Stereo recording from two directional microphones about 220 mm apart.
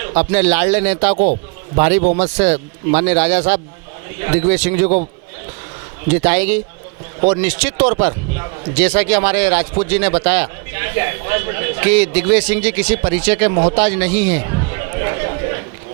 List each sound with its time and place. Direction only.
0.2 s a man's voice: 10° right (ahead or behind)
1.1 s a man's voice: 35° right (ahead or behind)
2.3 s a man's voice: 10° right (ahead or behind)
6.1 s a man's voice: 10° right (ahead or behind)
13.7 s chatter: 10° right (ahead or behind)